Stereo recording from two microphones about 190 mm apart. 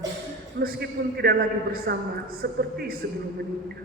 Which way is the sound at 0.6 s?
55° right (ahead or behind).